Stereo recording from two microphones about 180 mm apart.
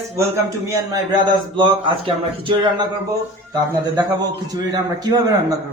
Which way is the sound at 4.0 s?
20° right (ahead or behind).